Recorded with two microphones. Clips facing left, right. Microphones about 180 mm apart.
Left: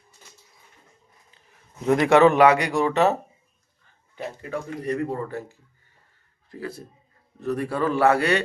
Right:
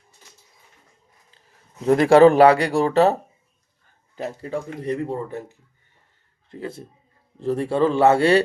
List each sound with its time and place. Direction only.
1.9 s a man's voice: 30° right (ahead or behind)
6.5 s a man's voice: 25° right (ahead or behind)